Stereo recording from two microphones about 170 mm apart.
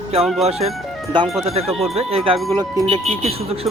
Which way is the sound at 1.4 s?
35° right (ahead or behind).